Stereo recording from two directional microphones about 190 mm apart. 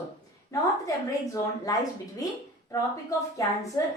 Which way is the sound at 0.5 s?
15° left (ahead or behind).